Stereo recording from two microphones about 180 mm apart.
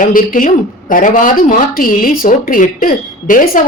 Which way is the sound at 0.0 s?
50° left (ahead or behind).